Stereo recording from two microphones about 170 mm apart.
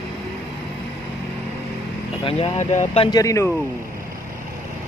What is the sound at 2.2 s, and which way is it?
Speech, 35° left (ahead or behind).